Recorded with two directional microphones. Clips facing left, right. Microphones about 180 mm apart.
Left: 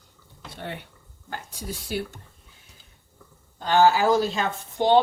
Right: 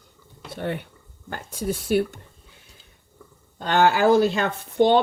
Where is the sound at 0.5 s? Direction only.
55° right (ahead or behind).